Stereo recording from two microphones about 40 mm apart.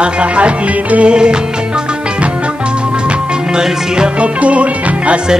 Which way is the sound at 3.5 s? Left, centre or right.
Centre.